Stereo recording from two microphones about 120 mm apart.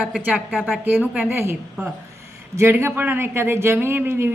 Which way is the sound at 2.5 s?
20° right (ahead or behind).